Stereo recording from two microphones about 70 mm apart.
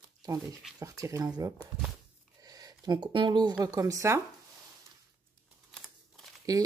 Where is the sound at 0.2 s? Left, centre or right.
Right.